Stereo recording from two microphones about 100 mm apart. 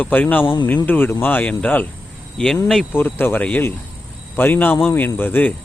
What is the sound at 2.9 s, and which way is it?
Speech, 20° left (ahead or behind).